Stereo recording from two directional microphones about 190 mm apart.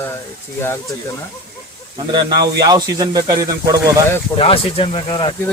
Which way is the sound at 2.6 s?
20° right (ahead or behind).